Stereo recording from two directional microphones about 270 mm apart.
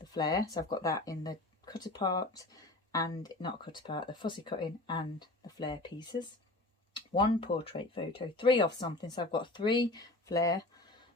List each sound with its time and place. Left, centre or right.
0.0 s speech: centre